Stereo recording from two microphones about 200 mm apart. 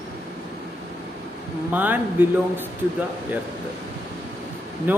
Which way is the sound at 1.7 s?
10° right (ahead or behind).